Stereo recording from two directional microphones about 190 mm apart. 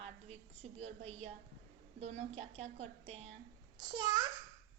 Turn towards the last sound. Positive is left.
turn(degrees=-20)  # may be behind; listen again after turning